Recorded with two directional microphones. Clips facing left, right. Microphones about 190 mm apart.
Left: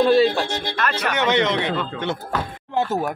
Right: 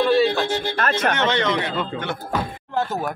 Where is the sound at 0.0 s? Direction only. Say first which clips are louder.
Left 2 dB; 10° left (ahead or behind).